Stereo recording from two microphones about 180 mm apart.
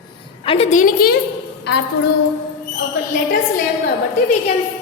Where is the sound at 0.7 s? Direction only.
45° left (ahead or behind).